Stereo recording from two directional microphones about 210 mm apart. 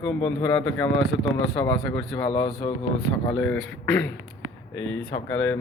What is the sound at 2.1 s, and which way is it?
Speech, 25° left (ahead or behind).